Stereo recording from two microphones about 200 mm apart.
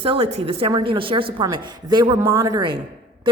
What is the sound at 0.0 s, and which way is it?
A woman's voice, 30° right (ahead or behind).